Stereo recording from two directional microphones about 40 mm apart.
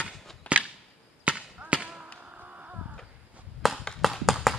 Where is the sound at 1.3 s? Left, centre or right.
Right.